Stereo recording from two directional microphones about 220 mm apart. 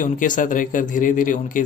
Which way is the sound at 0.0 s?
35° left (ahead or behind).